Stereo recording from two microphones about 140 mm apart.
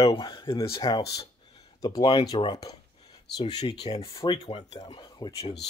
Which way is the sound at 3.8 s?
45° left (ahead or behind).